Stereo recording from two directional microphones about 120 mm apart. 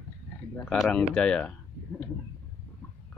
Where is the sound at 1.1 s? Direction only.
10° left (ahead or behind).